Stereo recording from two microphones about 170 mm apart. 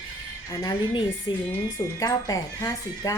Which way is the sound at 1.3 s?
25° left (ahead or behind).